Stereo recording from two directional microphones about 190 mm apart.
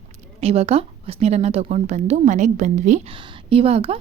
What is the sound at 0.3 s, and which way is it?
A woman's voice, 35° right (ahead or behind).